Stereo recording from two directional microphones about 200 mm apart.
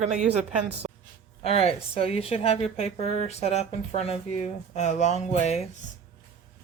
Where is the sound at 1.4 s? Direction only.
30° left (ahead or behind).